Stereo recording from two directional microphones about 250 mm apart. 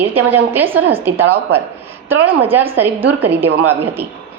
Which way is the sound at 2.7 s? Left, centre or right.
Centre.